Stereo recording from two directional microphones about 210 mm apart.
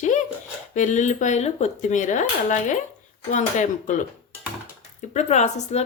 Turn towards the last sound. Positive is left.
turn(degrees=30)  # may be behind; listen again after turning